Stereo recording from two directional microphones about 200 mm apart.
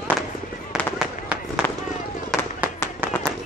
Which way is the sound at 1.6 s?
10° left (ahead or behind).